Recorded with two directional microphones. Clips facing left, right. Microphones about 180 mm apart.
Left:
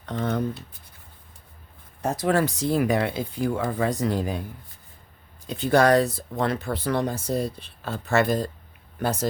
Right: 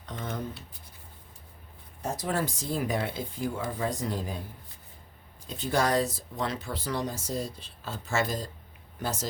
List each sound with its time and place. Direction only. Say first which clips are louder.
0.0 s speech: left 9 dB; 65° left (ahead or behind)
2.0 s speech: left 8 dB; 75° left (ahead or behind)
5.5 s speech: left 8 dB; 65° left (ahead or behind)